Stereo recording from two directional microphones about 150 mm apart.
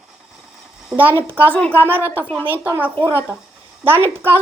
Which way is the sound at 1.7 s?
15° right (ahead or behind).